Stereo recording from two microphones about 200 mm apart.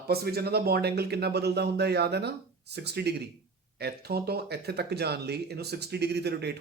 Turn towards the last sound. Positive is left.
turn(degrees=-55)  # may be behind; listen again after turning